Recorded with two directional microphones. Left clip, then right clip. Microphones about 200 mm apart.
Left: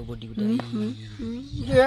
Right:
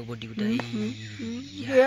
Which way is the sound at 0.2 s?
5° left (ahead or behind).